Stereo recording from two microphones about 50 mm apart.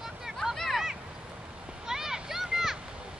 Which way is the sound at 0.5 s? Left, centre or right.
Centre.